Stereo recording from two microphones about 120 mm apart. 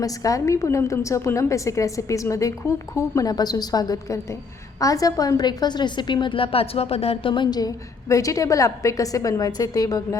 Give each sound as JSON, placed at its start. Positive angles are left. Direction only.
{"t": 0.0, "sound": "a woman's voice", "side_deg": 30}